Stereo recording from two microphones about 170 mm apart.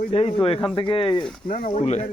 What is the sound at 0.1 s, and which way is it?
Speech, 35° left (ahead or behind).